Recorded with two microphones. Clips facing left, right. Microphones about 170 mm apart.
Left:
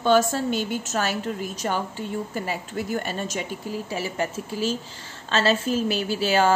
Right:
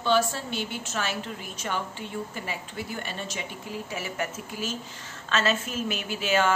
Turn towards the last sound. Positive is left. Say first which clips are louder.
# left 4 dB
turn(degrees=35)  # may be behind; listen again after turning